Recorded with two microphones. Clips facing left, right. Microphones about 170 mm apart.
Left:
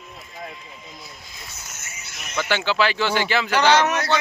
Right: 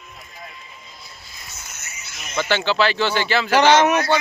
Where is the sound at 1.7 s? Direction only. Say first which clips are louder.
Even; 50° left (ahead or behind).